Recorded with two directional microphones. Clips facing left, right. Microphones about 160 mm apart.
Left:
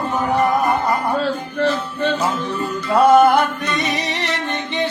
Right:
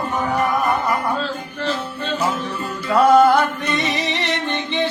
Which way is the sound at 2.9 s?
25° left (ahead or behind).